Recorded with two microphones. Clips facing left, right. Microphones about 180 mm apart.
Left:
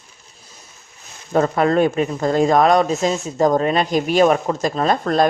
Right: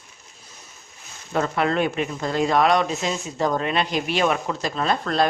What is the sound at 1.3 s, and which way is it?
Speech, 40° left (ahead or behind).